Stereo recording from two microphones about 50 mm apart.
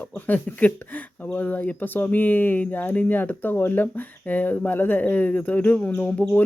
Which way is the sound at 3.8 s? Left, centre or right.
Left.